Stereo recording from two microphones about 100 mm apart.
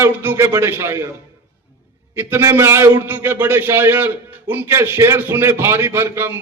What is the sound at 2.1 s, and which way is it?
A man's voice, 25° right (ahead or behind).